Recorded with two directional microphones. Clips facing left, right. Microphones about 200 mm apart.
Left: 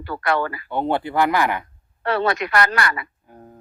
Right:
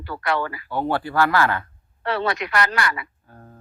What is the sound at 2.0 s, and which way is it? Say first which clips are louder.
A man's voice: left 3 dB; 50° left (ahead or behind).